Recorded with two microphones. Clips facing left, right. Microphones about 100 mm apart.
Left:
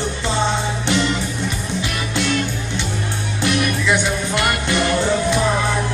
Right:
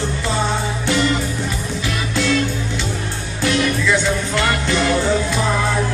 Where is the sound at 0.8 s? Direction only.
20° left (ahead or behind).